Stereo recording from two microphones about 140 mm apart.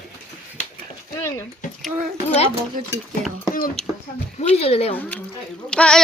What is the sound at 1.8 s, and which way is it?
Speech, centre (ahead or behind).